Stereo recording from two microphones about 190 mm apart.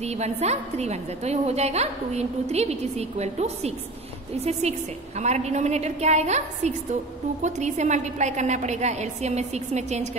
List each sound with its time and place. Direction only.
0.0 s a woman's voice: 35° right (ahead or behind)